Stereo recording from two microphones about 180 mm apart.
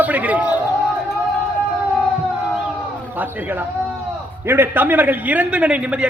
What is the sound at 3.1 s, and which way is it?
A man's voice, 10° right (ahead or behind).